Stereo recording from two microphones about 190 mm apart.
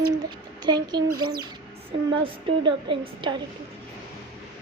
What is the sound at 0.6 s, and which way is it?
Speech, 20° right (ahead or behind).